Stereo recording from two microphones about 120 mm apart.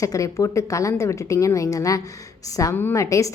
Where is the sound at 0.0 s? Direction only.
25° left (ahead or behind).